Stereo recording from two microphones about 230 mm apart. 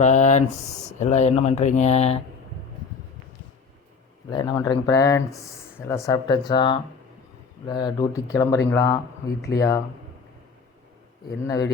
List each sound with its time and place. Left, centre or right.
0.0 s speech: left
4.3 s speech: centre
11.4 s speech: centre